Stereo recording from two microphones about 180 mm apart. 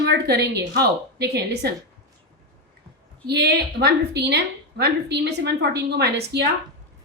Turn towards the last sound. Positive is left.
turn(degrees=-65)  # may be behind; listen again after turning